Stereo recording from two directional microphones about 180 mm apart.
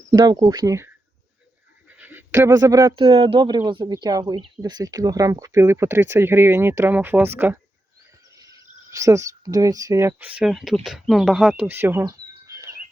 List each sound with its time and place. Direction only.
0.1 s a woman's voice: 25° right (ahead or behind)
2.0 s a sound: 10° right (ahead or behind)
3.0 s a woman's voice: 30° right (ahead or behind)